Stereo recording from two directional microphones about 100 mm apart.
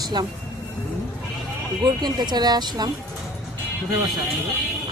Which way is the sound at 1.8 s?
50° right (ahead or behind).